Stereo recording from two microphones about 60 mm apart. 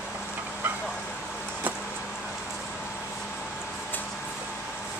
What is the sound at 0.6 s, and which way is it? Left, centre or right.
Vehicle, right.